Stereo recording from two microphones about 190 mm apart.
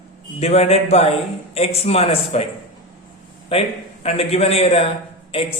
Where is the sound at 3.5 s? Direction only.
30° left (ahead or behind).